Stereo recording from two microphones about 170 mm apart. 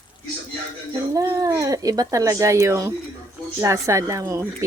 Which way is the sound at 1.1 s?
20° right (ahead or behind).